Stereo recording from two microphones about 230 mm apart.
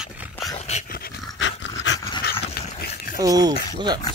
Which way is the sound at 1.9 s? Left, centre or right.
Left.